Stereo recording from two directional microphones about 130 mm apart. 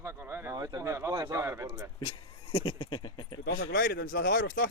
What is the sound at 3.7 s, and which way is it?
Speech, 90° left.